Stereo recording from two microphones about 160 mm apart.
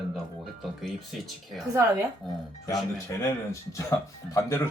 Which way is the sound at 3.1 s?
15° left (ahead or behind).